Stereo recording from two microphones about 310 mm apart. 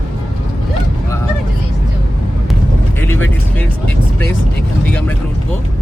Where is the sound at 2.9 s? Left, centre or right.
Centre.